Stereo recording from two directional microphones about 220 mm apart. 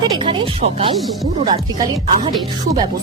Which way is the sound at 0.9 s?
Centre (ahead or behind).